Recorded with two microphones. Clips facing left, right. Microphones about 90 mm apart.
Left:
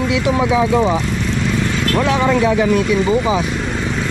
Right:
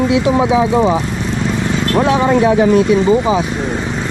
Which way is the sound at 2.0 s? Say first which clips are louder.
Right 3 dB; 25° right (ahead or behind).